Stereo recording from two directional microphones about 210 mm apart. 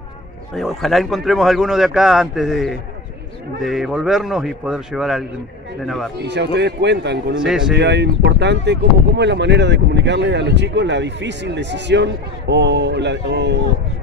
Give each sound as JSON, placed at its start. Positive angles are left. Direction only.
{"t": 0.6, "sound": "speech", "side_deg": 0}
{"t": 6.2, "sound": "speech", "side_deg": -55}
{"t": 7.3, "sound": "speech", "side_deg": -5}
{"t": 7.7, "sound": "speech", "side_deg": -55}